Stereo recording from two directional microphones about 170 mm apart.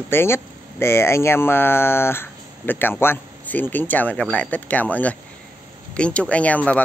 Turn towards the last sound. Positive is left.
turn(degrees=10)  # may be behind; listen again after turning